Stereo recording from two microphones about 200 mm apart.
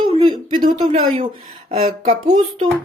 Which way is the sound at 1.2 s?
40° right (ahead or behind).